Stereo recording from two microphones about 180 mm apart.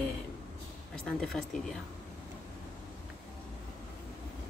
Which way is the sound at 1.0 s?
Centre (ahead or behind).